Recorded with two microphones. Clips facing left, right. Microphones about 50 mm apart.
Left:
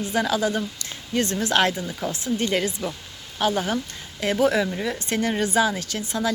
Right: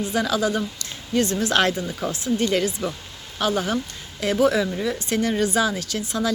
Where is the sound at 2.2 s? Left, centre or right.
Left.